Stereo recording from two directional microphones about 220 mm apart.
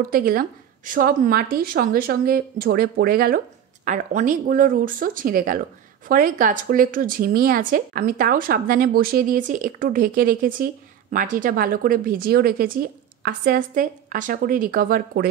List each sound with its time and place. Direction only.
0.1 s speech: 40° right (ahead or behind)